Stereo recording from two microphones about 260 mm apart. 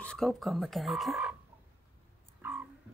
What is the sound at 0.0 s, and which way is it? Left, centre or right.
Speech, centre.